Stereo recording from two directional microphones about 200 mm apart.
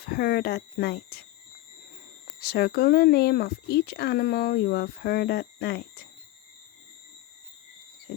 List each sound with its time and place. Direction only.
0.0 s speech: 50° left (ahead or behind)
2.4 s speech: 50° left (ahead or behind)